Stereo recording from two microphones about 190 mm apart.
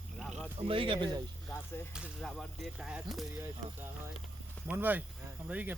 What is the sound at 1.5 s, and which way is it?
Speech, 15° left (ahead or behind).